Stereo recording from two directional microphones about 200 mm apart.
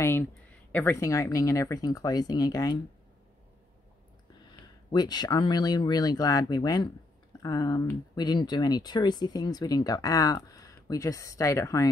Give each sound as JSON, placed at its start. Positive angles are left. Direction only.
{"t": 0.0, "sound": "speech", "side_deg": 10}
{"t": 4.5, "sound": "speech", "side_deg": 20}